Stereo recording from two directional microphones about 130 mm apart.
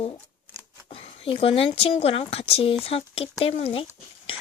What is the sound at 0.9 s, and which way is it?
Speech, 45° left (ahead or behind).